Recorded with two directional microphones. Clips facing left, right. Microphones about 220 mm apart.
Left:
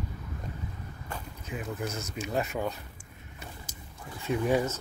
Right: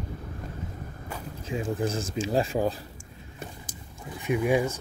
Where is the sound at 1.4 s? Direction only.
30° right (ahead or behind).